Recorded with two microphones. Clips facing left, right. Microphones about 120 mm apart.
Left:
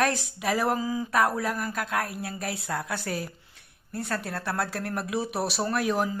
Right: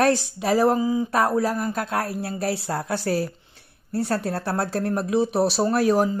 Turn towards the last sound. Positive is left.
turn(degrees=-35)  # may be behind; listen again after turning